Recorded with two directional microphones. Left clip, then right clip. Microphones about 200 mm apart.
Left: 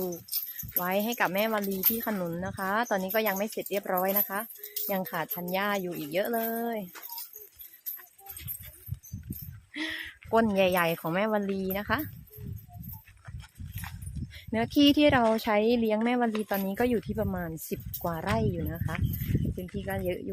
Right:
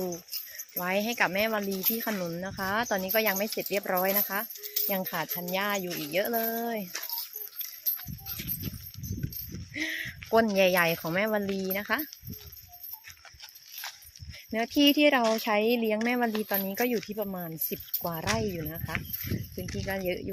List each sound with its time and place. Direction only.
0.8 s speech: 10° left (ahead or behind)
9.7 s a sound: 10° left (ahead or behind)
10.4 s speech: 10° left (ahead or behind)
14.5 s speech: 20° left (ahead or behind)